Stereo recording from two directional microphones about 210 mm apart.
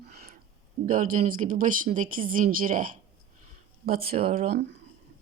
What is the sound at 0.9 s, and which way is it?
Speech, 40° right (ahead or behind).